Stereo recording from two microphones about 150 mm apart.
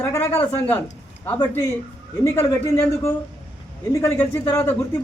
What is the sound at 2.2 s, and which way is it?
Speech, 20° left (ahead or behind).